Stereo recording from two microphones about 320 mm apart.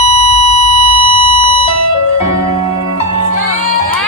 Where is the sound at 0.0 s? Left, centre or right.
Left.